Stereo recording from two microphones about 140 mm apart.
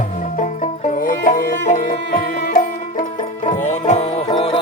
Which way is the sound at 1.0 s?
85° left.